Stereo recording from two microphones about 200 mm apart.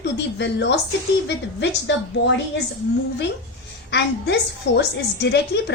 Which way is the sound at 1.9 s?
65° left (ahead or behind).